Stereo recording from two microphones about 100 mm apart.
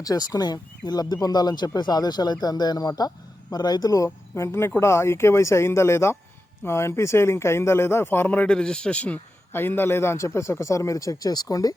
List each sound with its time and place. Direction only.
0.0 s speech: 40° left (ahead or behind)